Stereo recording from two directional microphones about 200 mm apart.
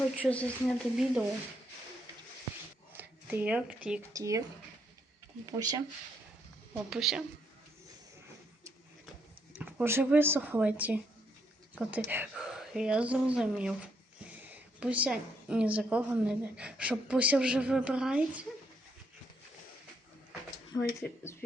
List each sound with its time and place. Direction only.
0.3 s a woman's voice: 5° left (ahead or behind)
2.9 s speech: 10° right (ahead or behind)
4.1 s speech: 15° right (ahead or behind)
5.5 s speech: 15° right (ahead or behind)
6.7 s a woman's voice: centre (ahead or behind)
9.6 s a woman's voice: 10° right (ahead or behind)